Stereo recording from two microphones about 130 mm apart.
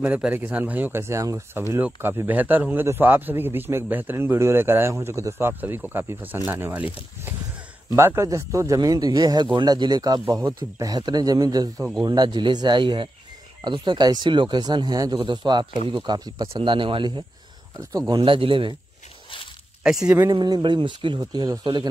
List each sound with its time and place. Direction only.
0.0 s a man's voice: 10° right (ahead or behind); by 17.2 s 40° right (ahead or behind)
17.7 s a man's voice: 30° right (ahead or behind)
18.2 s speech: 40° right (ahead or behind)
19.8 s speech: 5° right (ahead or behind)
20.3 s speech: 35° right (ahead or behind)